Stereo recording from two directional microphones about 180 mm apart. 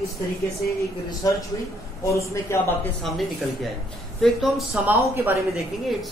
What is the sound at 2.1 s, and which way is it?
Speech, 15° left (ahead or behind).